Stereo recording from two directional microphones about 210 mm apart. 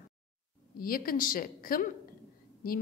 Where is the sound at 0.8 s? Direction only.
45° left (ahead or behind).